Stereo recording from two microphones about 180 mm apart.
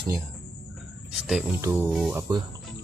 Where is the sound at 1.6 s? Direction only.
10° right (ahead or behind).